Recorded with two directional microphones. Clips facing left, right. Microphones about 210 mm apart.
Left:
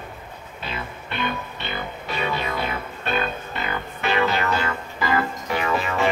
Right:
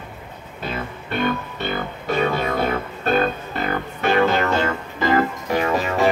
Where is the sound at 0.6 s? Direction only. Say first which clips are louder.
Right 5 dB; 45° right (ahead or behind).